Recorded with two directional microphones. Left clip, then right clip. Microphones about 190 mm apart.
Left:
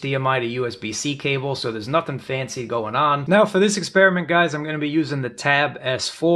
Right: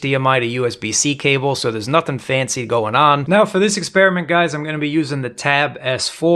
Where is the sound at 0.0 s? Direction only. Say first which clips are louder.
Right 5 dB; 30° right (ahead or behind).